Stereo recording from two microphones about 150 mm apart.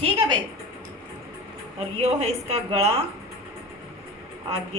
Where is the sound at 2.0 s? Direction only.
45° right (ahead or behind).